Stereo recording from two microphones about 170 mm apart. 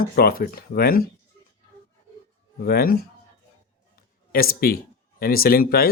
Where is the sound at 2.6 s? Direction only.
65° left (ahead or behind).